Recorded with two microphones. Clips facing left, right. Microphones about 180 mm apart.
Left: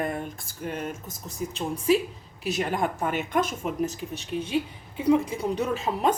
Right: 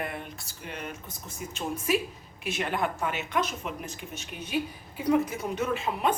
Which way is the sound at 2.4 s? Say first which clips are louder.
Left 3 dB; 40° left (ahead or behind).